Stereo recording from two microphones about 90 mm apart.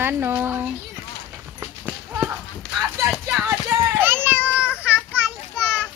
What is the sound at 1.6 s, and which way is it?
Run, 15° right (ahead or behind).